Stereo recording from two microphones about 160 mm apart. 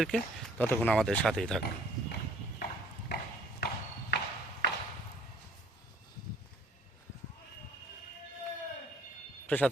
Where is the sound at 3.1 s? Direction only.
90° left.